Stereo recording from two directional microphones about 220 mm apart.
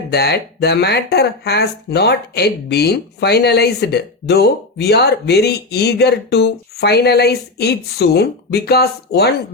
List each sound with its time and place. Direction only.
0.1 s speech: 50° left (ahead or behind)